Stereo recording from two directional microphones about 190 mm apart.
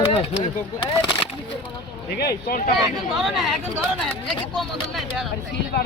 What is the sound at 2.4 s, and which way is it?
Speech, 50° left (ahead or behind).